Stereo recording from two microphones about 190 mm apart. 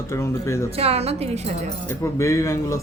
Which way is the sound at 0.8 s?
30° right (ahead or behind).